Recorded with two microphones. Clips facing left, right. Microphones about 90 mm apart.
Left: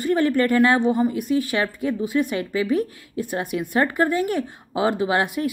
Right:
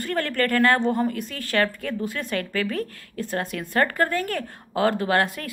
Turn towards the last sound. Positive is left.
turn(degrees=15)  # may be behind; listen again after turning